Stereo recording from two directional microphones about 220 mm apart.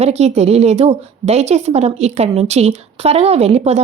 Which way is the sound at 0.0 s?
30° right (ahead or behind).